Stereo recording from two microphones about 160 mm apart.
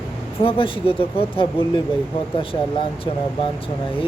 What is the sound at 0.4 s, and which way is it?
Speech, 35° left (ahead or behind).